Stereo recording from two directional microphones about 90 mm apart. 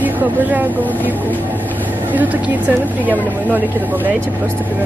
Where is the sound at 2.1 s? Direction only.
20° right (ahead or behind).